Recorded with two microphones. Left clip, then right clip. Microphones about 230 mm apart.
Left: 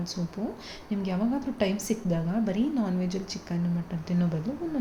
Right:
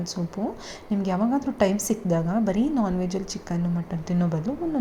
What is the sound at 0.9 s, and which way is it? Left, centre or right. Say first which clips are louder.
A woman's voice: right 5 dB; centre.